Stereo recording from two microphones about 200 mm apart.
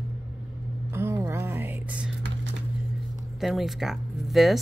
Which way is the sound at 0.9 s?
15° right (ahead or behind).